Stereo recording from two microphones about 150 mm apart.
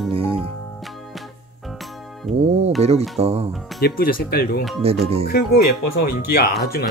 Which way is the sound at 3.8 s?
85° left.